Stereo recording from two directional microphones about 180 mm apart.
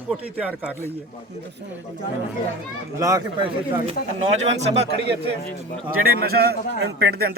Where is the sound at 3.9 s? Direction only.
35° right (ahead or behind).